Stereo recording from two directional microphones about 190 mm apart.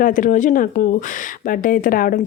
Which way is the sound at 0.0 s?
45° left (ahead or behind).